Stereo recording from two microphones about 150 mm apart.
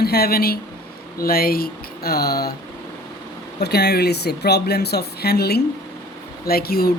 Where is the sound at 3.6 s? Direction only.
90° left.